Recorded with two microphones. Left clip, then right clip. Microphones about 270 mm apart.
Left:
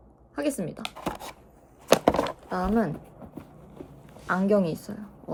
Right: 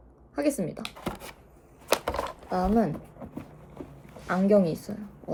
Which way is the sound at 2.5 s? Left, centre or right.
Centre.